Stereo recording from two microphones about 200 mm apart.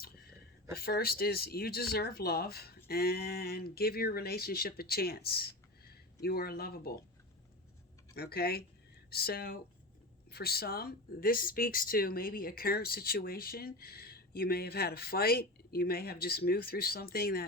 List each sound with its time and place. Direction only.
0.8 s speech: 50° left (ahead or behind)
8.1 s speech: 50° left (ahead or behind)